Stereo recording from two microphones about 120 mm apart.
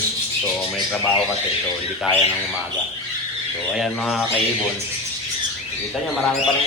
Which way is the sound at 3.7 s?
Centre (ahead or behind).